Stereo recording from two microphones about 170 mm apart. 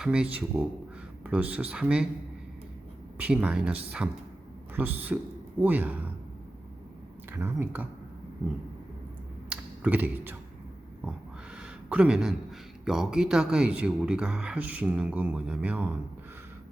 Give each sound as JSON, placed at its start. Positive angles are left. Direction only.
{"t": 0.0, "sound": "speech", "side_deg": -5}
{"t": 3.2, "sound": "a man's voice", "side_deg": -10}
{"t": 7.3, "sound": "speech", "side_deg": -10}
{"t": 9.5, "sound": "a sound", "side_deg": -10}
{"t": 11.5, "sound": "speech", "side_deg": -5}